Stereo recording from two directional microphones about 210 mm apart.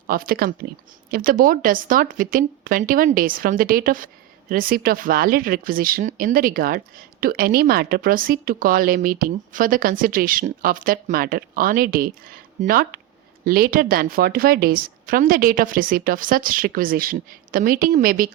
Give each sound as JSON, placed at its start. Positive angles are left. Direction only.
{"t": 0.1, "sound": "speech", "side_deg": -45}